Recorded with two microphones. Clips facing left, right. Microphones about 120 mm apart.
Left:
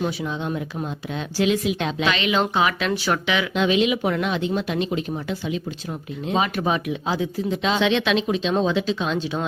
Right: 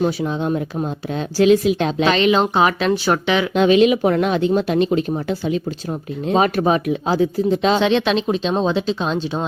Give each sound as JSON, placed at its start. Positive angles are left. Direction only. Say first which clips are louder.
{"t": 0.0, "sound": "speech", "louder": "right 6 dB", "side_deg": -40}